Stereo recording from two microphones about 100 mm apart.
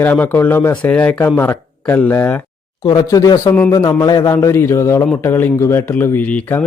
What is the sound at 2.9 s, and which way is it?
Speech, 40° left (ahead or behind).